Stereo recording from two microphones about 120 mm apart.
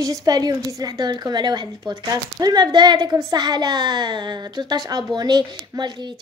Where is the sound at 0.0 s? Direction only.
30° right (ahead or behind).